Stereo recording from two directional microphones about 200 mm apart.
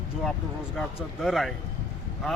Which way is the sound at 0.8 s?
Centre (ahead or behind).